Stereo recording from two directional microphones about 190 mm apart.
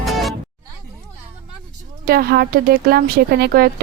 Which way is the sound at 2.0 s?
50° right (ahead or behind).